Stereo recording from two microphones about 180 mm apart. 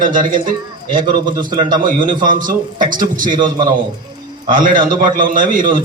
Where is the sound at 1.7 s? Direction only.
50° right (ahead or behind).